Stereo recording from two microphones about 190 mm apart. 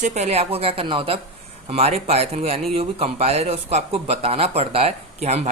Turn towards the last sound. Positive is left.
turn(degrees=-35)  # may be behind; listen again after turning